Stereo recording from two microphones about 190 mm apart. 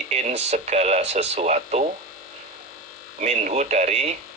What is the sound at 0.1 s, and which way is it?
Speech, 35° right (ahead or behind).